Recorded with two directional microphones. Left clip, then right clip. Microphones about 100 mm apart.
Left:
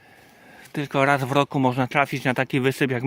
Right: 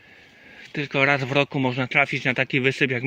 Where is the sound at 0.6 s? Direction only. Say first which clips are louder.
Even; 30° left (ahead or behind).